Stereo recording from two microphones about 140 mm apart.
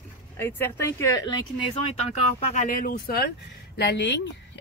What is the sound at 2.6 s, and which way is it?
Speech, 85° left.